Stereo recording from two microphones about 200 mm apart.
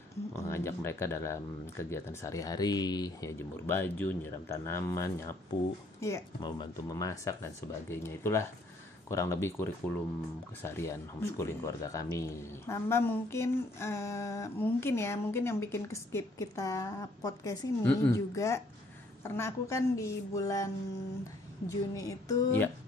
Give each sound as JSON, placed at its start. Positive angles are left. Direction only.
{"t": 0.3, "sound": "speech", "side_deg": 15}